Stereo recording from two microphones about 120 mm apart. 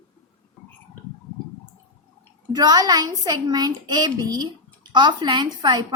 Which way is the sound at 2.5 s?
35° right (ahead or behind).